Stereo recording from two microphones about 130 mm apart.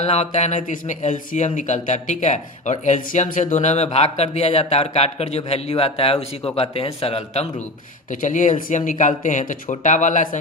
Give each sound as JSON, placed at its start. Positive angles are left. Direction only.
{"t": 0.0, "sound": "speech", "side_deg": 55}
{"t": 8.1, "sound": "speech", "side_deg": 80}